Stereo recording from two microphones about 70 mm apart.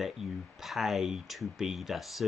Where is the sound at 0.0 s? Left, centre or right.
Centre.